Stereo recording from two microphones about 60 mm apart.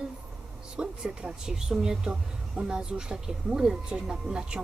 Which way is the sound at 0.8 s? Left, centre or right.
Centre.